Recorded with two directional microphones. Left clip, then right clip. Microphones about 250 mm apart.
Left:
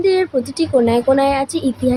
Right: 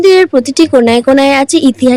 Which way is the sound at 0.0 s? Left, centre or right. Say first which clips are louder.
Right 9 dB; right.